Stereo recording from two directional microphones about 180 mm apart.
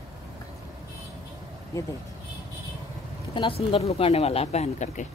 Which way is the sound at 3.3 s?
30° left (ahead or behind).